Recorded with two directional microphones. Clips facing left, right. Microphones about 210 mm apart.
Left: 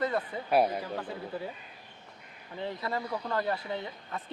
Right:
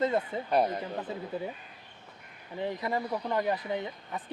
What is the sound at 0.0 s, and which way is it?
Speech, 25° right (ahead or behind).